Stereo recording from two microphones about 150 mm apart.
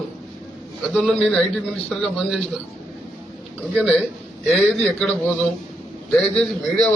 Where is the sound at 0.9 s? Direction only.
Centre (ahead or behind).